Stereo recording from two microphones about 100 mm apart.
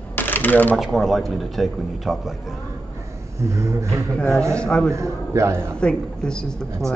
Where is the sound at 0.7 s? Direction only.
Centre (ahead or behind).